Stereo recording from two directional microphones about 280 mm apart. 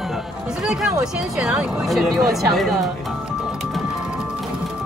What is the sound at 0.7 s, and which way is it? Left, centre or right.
Speech, centre.